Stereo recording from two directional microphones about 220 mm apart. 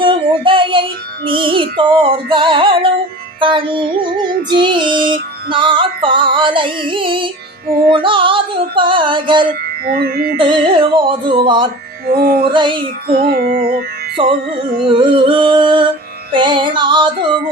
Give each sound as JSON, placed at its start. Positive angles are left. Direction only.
{"t": 0.0, "sound": "music", "side_deg": -20}
{"t": 9.8, "sound": "music", "side_deg": -45}
{"t": 10.3, "sound": "music", "side_deg": -20}
{"t": 12.0, "sound": "music", "side_deg": -40}
{"t": 12.5, "sound": "music", "side_deg": -20}
{"t": 13.1, "sound": "music", "side_deg": -45}
{"t": 14.2, "sound": "music", "side_deg": -25}